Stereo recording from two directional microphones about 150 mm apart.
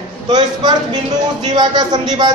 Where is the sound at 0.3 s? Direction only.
30° right (ahead or behind).